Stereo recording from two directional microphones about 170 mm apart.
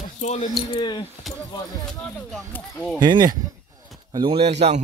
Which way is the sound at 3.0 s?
25° right (ahead or behind).